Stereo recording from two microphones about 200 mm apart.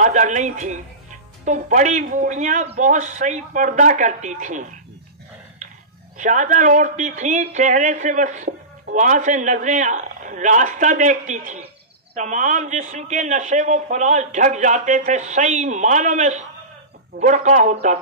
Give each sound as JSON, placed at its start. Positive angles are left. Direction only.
{"t": 0.0, "sound": "a man's voice", "side_deg": -40}
{"t": 6.1, "sound": "a man's voice", "side_deg": -40}